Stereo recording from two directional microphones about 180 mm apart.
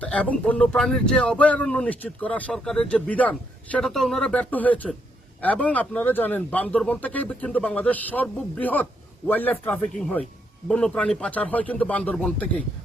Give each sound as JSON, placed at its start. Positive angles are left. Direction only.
{"t": 0.0, "sound": "speech", "side_deg": 5}